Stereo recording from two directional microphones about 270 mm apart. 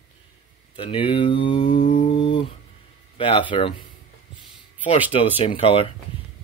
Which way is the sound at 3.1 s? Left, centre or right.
Centre.